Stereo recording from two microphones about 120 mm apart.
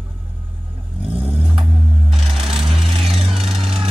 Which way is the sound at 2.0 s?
Centre (ahead or behind).